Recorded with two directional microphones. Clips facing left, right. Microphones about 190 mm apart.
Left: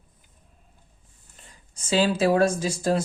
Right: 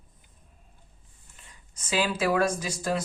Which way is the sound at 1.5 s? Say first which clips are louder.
Left 5 dB; 30° left (ahead or behind).